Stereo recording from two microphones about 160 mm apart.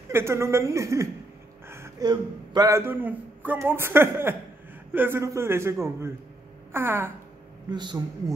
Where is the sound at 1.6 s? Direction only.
15° right (ahead or behind).